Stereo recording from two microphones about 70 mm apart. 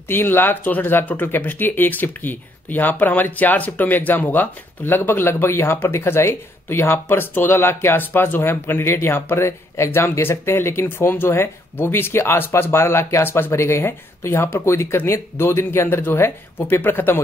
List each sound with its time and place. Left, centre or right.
0.1 s speech: left